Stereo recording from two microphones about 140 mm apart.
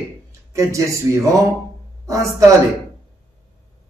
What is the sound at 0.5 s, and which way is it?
Speech, 20° right (ahead or behind).